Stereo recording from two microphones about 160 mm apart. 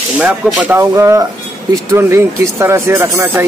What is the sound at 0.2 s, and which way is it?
Speech, 10° right (ahead or behind).